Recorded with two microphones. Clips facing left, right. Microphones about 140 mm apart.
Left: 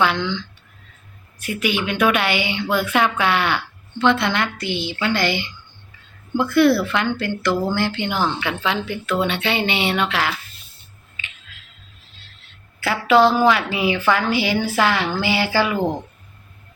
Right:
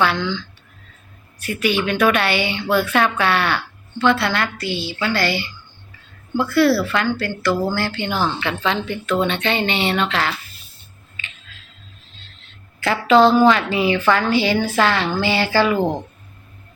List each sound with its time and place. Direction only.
0.0 s a woman's voice: 15° left (ahead or behind)
12.8 s a woman's voice: 10° left (ahead or behind)